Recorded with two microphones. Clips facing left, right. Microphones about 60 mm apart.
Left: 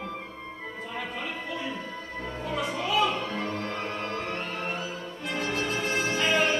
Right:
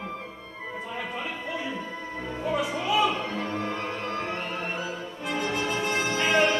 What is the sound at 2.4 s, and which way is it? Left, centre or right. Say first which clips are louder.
Music: right 3 dB; centre.